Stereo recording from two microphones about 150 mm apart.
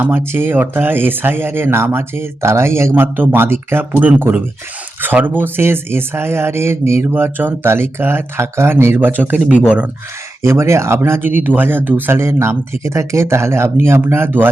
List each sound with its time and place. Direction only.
0.0 s speech: 15° right (ahead or behind)
10.4 s speech: 20° right (ahead or behind)